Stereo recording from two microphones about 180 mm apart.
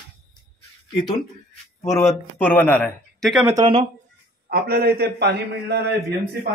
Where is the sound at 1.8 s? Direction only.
15° left (ahead or behind); by 3.4 s centre (ahead or behind).